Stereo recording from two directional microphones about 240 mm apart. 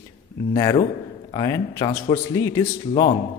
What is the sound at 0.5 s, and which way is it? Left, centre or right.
A man's voice, centre.